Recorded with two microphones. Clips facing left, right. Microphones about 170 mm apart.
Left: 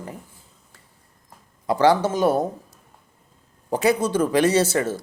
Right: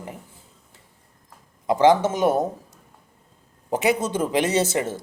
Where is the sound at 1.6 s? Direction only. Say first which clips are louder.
Right 1 dB; 20° right (ahead or behind).